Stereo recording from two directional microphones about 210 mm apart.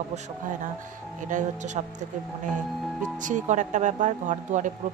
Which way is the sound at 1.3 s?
40° right (ahead or behind).